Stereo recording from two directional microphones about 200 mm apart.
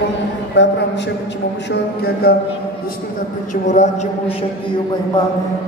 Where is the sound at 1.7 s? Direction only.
50° left (ahead or behind).